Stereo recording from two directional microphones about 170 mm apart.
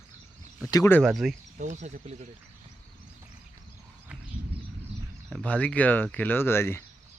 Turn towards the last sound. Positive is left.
turn(degrees=15)  # may be behind; listen again after turning